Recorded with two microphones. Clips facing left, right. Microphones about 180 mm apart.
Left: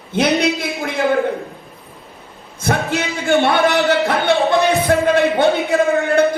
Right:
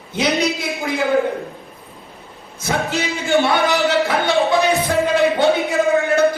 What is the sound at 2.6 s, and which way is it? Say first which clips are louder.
Speech: left 2 dB; 60° left (ahead or behind).